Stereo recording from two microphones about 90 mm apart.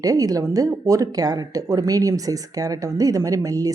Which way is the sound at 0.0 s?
40° right (ahead or behind).